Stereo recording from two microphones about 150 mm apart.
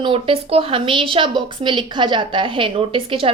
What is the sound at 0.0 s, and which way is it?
A woman's voice, 35° right (ahead or behind).